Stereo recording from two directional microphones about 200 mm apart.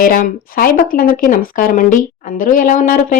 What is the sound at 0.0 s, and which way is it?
A woman's voice, 40° left (ahead or behind).